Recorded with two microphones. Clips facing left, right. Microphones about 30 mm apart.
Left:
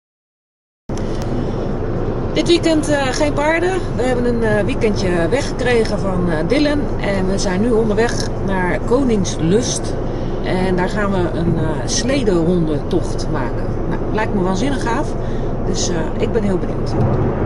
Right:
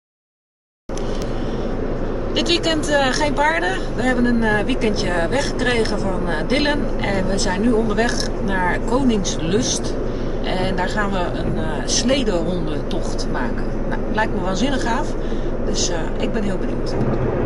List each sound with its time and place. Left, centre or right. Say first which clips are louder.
2.3 s speech: left 5 dB; centre
14.1 s speech: left 3 dB; centre